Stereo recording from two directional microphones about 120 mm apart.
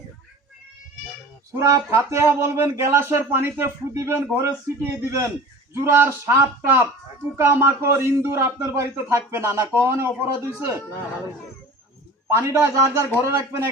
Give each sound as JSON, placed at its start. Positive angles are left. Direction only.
{"t": 1.5, "sound": "speech", "side_deg": -25}
{"t": 12.4, "sound": "speech", "side_deg": -25}